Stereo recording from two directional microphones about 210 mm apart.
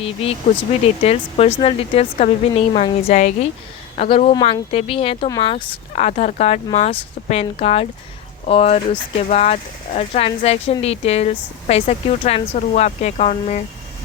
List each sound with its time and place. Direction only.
0.0 s speech: 25° left (ahead or behind)